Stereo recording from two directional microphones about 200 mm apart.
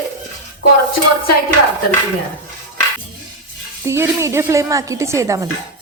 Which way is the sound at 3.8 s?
15° right (ahead or behind).